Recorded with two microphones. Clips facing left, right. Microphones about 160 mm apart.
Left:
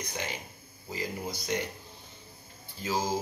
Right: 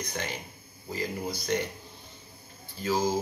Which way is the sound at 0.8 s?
15° left (ahead or behind).